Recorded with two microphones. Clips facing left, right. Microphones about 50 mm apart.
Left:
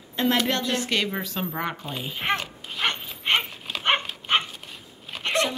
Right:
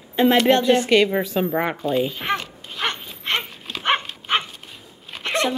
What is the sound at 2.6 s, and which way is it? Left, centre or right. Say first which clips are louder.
Dog: right 1 dB; centre.